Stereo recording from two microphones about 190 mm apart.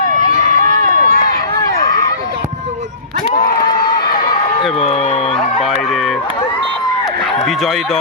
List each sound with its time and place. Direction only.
0.3 s run: 40° left (ahead or behind)
3.3 s a sound: 45° left (ahead or behind)
4.8 s speech: 35° left (ahead or behind)
7.4 s speech: centre (ahead or behind)